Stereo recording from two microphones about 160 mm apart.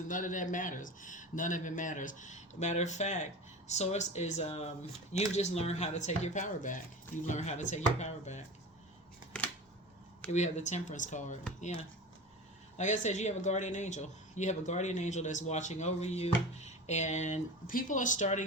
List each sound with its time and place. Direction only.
0.1 s speech: 55° left (ahead or behind)
10.3 s speech: 45° left (ahead or behind)
12.7 s speech: 50° left (ahead or behind)